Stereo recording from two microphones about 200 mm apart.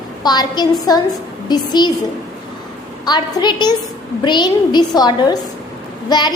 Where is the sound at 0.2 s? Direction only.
20° left (ahead or behind).